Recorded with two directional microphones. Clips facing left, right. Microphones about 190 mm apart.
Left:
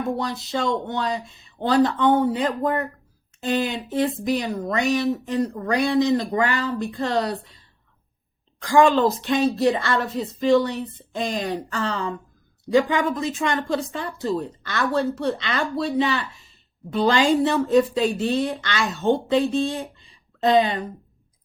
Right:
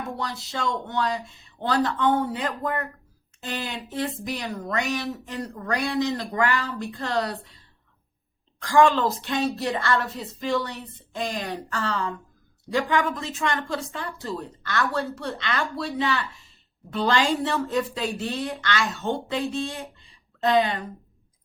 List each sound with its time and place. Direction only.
0.2 s a woman's voice: 20° left (ahead or behind)
8.6 s a woman's voice: 15° left (ahead or behind)